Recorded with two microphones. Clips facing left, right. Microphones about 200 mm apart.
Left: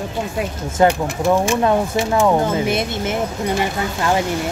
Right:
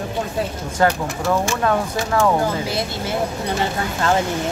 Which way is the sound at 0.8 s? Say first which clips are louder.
Left 4 dB; 20° left (ahead or behind).